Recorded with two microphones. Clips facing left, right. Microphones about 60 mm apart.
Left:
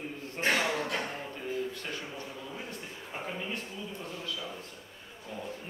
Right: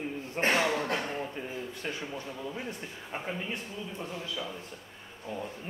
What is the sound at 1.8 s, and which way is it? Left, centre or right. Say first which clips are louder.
Speech: right 3 dB; centre.